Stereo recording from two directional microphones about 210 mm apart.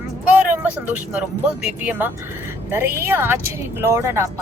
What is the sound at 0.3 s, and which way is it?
Vehicle, 5° right (ahead or behind).